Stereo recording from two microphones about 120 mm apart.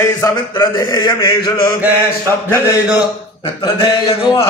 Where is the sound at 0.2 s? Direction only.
25° left (ahead or behind).